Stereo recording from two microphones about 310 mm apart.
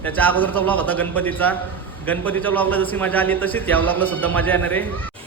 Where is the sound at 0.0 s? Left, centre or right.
Centre.